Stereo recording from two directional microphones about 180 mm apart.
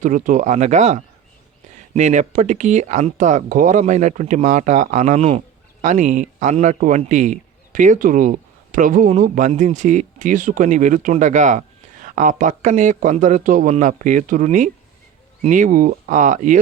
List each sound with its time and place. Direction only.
0.0 s a man's voice: 45° right (ahead or behind)